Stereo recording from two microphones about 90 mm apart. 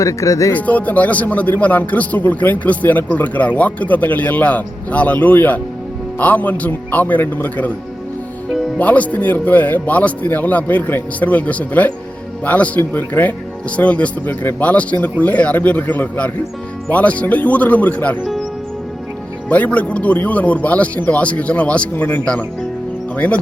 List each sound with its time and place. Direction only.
0.0 s speech: 35° left (ahead or behind)
0.5 s a man's voice: 15° left (ahead or behind)
8.8 s a man's voice: 15° left (ahead or behind)
19.5 s a man's voice: 15° left (ahead or behind)